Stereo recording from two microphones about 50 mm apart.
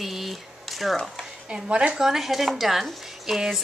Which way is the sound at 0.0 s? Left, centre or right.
Centre.